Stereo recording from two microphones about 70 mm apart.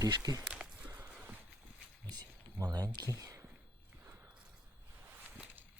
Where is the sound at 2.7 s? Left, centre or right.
Right.